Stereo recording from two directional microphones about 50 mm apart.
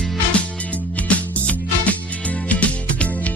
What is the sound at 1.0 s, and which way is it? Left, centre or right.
Music, left.